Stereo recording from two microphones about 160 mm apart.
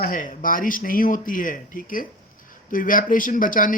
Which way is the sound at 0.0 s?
60° left (ahead or behind).